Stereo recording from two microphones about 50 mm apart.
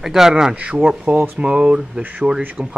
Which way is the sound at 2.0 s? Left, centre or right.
Right.